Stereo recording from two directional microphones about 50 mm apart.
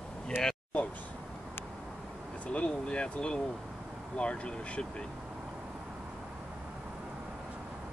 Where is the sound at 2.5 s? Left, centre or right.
Centre.